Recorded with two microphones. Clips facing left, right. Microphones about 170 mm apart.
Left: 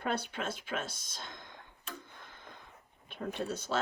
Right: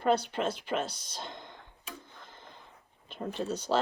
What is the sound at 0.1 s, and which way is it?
Speech, 50° left (ahead or behind).